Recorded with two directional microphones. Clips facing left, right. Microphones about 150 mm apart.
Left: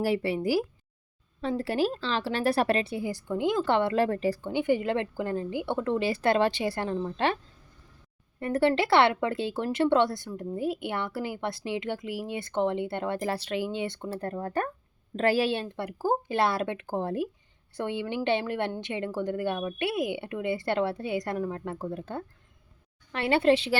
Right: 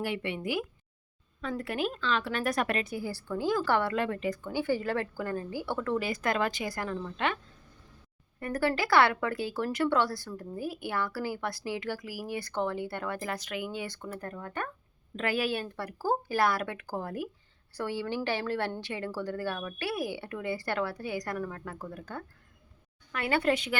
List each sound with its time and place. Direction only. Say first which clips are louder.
0.0 s speech: left 6 dB; 35° left (ahead or behind)
4.0 s speech: left 5 dB; 35° left (ahead or behind)
8.4 s speech: left 5 dB; 25° left (ahead or behind)